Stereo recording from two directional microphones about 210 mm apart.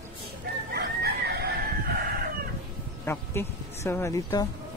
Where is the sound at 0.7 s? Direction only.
50° right (ahead or behind).